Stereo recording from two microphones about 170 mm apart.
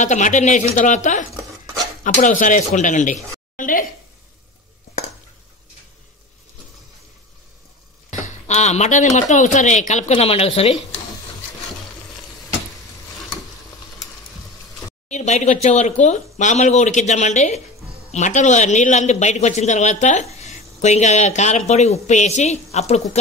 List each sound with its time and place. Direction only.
0.0 s speech: 45° left (ahead or behind)
8.2 s speech: 40° left (ahead or behind)
15.0 s speech: 45° left (ahead or behind)